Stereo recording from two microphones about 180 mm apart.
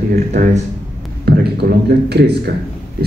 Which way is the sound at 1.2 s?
60° right (ahead or behind).